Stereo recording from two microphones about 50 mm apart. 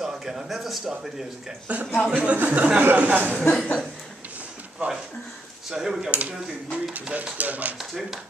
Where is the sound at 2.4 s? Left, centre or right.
Right.